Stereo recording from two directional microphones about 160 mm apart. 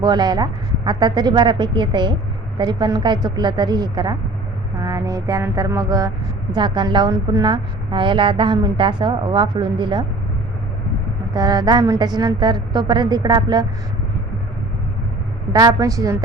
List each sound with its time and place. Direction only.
0.0 s a woman's voice: 25° right (ahead or behind)
11.3 s a woman's voice: 25° right (ahead or behind)
15.5 s a woman's voice: 20° right (ahead or behind)